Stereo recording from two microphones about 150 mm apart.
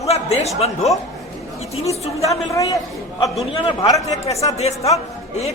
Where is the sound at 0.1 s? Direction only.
45° left (ahead or behind).